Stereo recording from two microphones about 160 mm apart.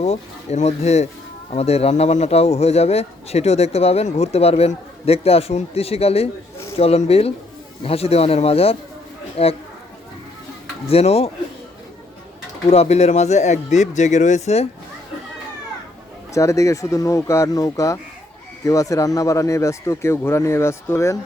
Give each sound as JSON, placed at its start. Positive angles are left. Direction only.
{"t": 0.0, "sound": "a man's voice", "side_deg": 40}
{"t": 10.8, "sound": "a man's voice", "side_deg": 40}
{"t": 12.6, "sound": "speech", "side_deg": 40}
{"t": 16.3, "sound": "speech", "side_deg": 20}